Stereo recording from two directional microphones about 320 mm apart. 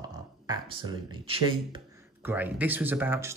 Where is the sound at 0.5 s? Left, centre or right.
Centre.